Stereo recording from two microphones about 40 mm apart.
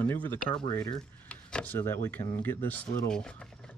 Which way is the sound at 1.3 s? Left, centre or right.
Left.